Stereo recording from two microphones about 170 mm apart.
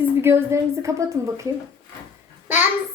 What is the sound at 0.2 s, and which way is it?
A child's voice, 15° right (ahead or behind).